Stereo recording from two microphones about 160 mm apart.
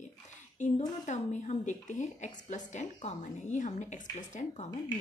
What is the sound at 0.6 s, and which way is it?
Speech, 50° left (ahead or behind).